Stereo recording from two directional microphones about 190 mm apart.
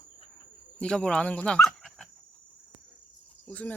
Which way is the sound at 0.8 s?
5° left (ahead or behind).